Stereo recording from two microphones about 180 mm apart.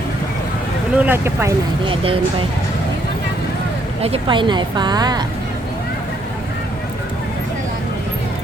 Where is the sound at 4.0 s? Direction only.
30° right (ahead or behind).